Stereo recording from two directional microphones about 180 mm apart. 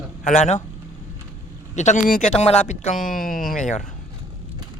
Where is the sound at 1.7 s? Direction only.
40° left (ahead or behind).